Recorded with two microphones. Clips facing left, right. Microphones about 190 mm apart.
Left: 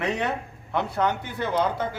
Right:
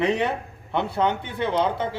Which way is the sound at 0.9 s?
25° right (ahead or behind).